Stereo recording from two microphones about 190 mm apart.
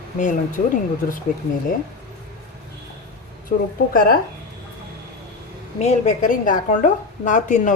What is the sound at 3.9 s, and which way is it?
Speech, 50° left (ahead or behind).